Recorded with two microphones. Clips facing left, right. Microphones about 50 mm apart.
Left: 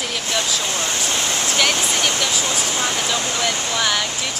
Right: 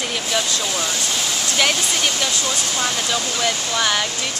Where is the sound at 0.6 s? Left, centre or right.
Left.